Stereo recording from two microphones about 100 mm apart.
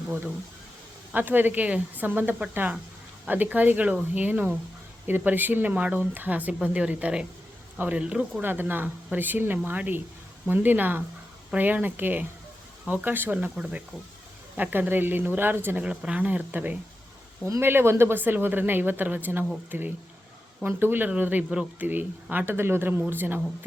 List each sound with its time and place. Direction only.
1.1 s speech: 20° right (ahead or behind)